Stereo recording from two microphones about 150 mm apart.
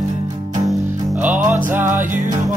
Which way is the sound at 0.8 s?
20° right (ahead or behind).